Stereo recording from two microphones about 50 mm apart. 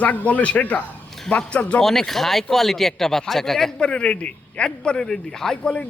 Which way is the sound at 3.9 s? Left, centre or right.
Left.